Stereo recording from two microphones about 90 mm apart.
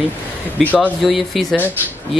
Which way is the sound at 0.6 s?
20° left (ahead or behind).